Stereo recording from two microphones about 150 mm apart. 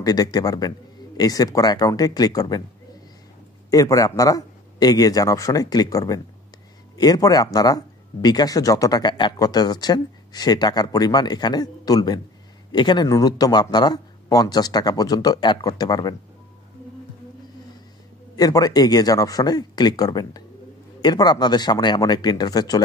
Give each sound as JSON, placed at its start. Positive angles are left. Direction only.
{"t": 0.0, "sound": "speech", "side_deg": 25}
{"t": 3.7, "sound": "speech", "side_deg": 20}
{"t": 18.3, "sound": "speech", "side_deg": 25}